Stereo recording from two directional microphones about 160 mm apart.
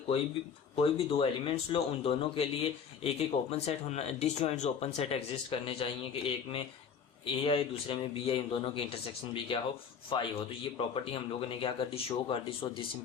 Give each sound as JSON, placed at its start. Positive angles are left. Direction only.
{"t": 0.8, "sound": "a man's voice", "side_deg": 35}
{"t": 10.1, "sound": "a man's voice", "side_deg": 30}